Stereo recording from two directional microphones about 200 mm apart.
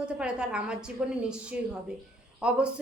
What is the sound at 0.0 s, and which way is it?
A woman's voice, 5° right (ahead or behind).